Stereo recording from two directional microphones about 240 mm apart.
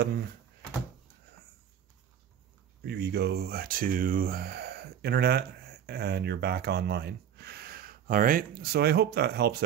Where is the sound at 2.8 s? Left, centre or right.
Right.